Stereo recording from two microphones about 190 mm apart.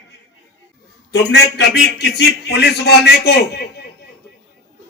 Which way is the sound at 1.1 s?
65° left (ahead or behind).